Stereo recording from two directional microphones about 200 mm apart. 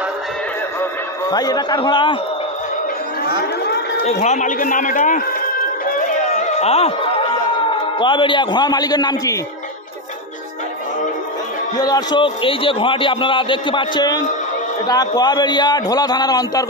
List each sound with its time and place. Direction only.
1.3 s a man's voice: 20° left (ahead or behind)
4.1 s a man's voice: 35° left (ahead or behind)
6.3 s a sound: 35° left (ahead or behind)
8.0 s a man's voice: 25° left (ahead or behind)
11.8 s a man's voice: 20° left (ahead or behind)